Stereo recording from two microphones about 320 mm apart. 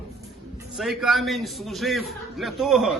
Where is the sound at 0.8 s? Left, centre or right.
Centre.